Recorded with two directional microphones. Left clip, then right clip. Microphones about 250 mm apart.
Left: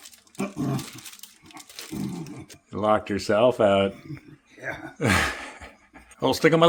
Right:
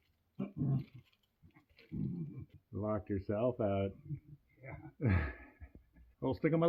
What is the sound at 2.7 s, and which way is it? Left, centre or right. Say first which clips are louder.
Speech: left 16 dB; centre.